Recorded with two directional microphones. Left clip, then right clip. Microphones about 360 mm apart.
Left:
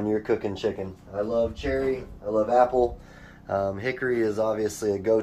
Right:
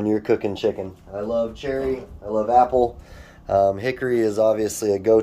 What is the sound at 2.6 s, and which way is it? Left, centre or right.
Speech, right.